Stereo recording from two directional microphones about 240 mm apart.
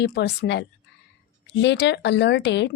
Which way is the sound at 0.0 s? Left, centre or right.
Left.